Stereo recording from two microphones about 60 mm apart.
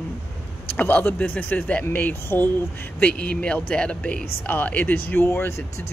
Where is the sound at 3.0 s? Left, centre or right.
Left.